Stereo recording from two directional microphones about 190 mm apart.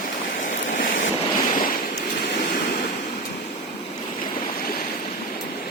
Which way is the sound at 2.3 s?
45° left (ahead or behind).